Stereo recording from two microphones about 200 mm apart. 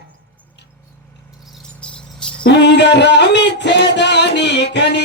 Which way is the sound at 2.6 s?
60° left (ahead or behind).